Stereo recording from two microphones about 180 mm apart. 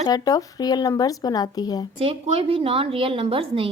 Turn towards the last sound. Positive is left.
turn(degrees=-30)  # may be behind; listen again after turning